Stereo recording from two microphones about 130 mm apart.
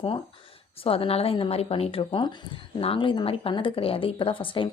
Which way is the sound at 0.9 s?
45° left (ahead or behind).